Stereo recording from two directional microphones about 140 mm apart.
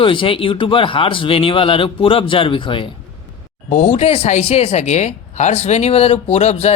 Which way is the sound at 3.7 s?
50° left (ahead or behind).